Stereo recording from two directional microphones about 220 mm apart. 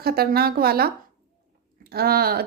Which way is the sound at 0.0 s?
45° right (ahead or behind).